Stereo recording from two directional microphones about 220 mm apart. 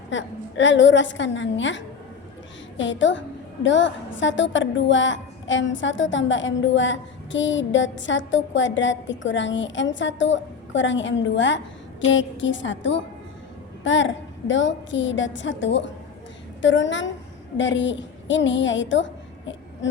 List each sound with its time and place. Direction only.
0.1 s a woman's voice: 55° left (ahead or behind)